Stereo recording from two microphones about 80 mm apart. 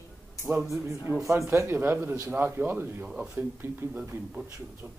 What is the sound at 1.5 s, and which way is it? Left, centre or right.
Speech, right.